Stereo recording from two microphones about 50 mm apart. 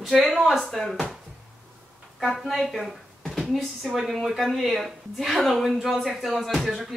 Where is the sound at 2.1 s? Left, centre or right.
Centre.